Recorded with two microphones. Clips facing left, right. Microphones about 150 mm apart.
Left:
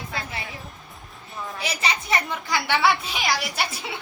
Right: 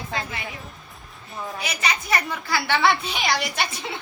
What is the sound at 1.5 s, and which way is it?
A woman's voice, 30° left (ahead or behind).